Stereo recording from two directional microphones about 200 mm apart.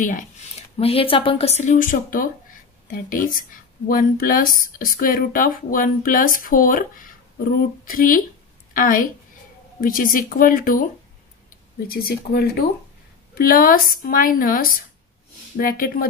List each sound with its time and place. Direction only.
0.7 s a woman's voice: 30° left (ahead or behind); by 10.9 s 45° left (ahead or behind)
11.9 s speech: 50° left (ahead or behind)